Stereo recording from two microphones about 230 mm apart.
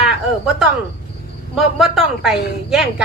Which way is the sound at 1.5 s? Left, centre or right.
Centre.